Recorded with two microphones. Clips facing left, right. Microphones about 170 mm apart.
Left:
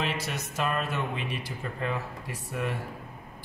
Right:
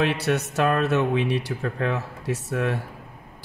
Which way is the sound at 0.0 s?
70° right (ahead or behind).